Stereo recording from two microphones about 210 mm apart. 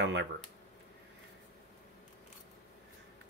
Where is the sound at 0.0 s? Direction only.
55° right (ahead or behind).